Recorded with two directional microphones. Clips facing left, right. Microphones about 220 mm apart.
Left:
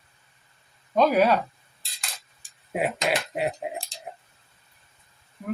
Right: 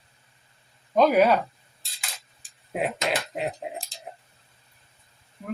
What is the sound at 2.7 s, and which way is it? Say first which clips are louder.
Speech: left 1 dB; centre (ahead or behind).